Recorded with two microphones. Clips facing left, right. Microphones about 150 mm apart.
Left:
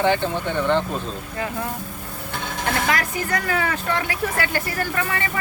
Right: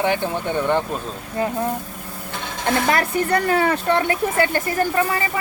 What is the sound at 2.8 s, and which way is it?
Speech, 30° right (ahead or behind).